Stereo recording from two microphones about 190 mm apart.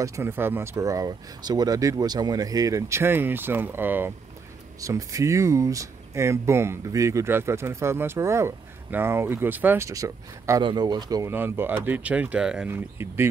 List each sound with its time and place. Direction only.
0.0 s speech: 15° right (ahead or behind)